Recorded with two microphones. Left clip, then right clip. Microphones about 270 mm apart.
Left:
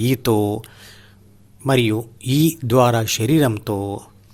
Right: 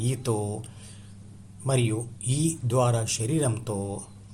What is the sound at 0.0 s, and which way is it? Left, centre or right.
Speech, left.